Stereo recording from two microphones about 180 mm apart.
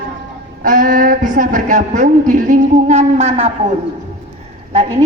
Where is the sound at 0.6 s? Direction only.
50° right (ahead or behind).